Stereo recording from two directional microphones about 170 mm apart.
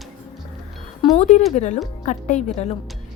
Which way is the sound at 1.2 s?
45° left (ahead or behind).